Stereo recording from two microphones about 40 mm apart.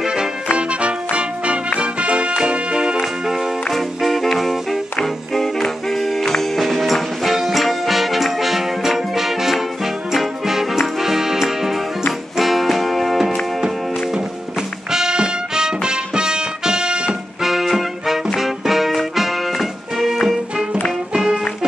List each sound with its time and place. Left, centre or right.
0.0 s music: centre
3.7 s music: centre
14.9 s music: centre
17.4 s music: centre
21.1 s music: right